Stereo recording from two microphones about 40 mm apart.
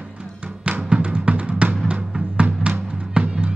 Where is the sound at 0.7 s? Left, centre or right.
Right.